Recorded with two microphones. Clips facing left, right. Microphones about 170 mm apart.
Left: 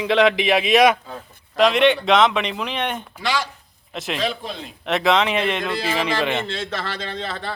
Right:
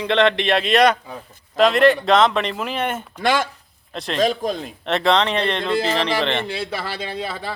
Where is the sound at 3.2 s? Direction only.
50° right (ahead or behind).